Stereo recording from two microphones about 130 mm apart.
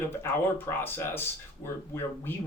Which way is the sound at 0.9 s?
15° left (ahead or behind).